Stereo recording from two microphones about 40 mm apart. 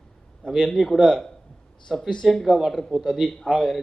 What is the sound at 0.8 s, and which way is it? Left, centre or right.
Speech, centre.